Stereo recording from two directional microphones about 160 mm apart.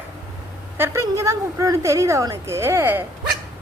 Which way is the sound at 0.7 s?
15° right (ahead or behind).